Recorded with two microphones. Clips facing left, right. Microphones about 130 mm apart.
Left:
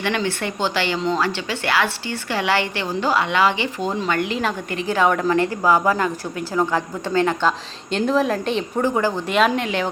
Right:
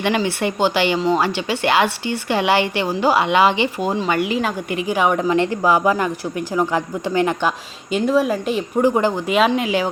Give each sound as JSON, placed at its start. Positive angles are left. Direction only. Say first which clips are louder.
{"t": 0.0, "sound": "a woman's voice", "louder": "right 4 dB", "side_deg": -15}
{"t": 7.9, "sound": "a woman's voice", "louder": "right 2 dB", "side_deg": -5}
{"t": 8.8, "sound": "a woman's voice", "louder": "right 4 dB", "side_deg": -15}
{"t": 9.2, "sound": "a woman's voice", "louder": "right 2 dB", "side_deg": -5}